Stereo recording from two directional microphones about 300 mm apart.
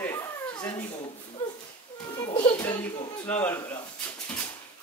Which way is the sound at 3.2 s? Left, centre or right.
Centre.